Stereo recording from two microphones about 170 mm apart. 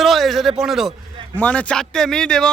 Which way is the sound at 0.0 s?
Centre (ahead or behind).